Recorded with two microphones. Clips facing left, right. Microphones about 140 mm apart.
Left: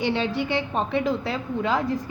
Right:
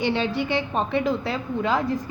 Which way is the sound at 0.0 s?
60° right (ahead or behind).